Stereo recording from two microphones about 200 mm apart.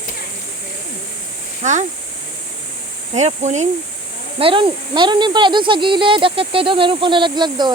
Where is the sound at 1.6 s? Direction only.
35° right (ahead or behind).